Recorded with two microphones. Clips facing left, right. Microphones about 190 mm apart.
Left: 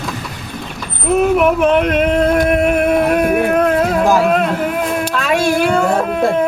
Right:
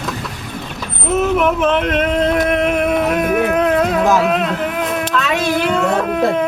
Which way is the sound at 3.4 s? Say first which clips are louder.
Left 2 dB; 50° left (ahead or behind).